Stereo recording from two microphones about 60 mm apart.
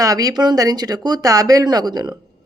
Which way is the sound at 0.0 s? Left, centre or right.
Right.